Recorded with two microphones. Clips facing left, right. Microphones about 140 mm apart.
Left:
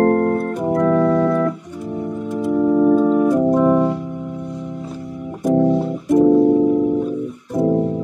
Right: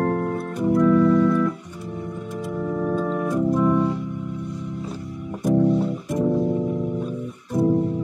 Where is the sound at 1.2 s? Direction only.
65° left (ahead or behind).